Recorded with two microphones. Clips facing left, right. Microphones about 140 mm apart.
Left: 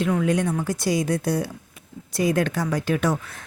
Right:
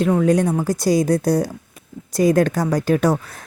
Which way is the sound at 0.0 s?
40° right (ahead or behind).